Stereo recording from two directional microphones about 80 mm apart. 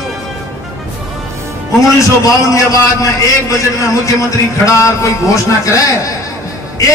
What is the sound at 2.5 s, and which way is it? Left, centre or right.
A man's voice, left.